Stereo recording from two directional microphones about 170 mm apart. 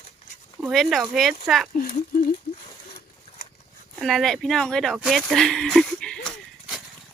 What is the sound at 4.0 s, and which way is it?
Speech, centre (ahead or behind).